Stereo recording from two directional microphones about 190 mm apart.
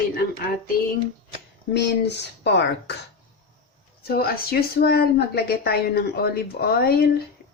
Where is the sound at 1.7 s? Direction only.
65° left (ahead or behind).